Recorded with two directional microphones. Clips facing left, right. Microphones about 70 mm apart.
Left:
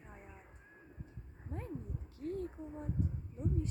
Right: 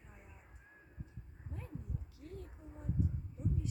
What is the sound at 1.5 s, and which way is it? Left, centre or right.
Speech, left.